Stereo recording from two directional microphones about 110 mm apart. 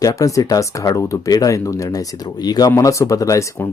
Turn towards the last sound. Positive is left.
turn(degrees=30)  # may be behind; listen again after turning